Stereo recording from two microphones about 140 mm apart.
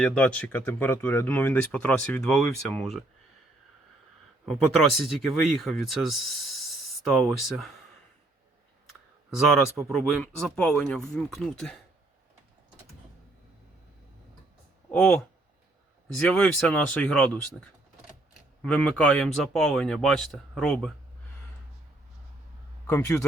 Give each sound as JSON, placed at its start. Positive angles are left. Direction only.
{"t": 0.0, "sound": "speech", "side_deg": 10}
{"t": 4.4, "sound": "speech", "side_deg": 0}
{"t": 9.3, "sound": "speech", "side_deg": 0}
{"t": 14.8, "sound": "speech", "side_deg": 5}
{"t": 18.6, "sound": "speech", "side_deg": 10}
{"t": 22.9, "sound": "speech", "side_deg": 20}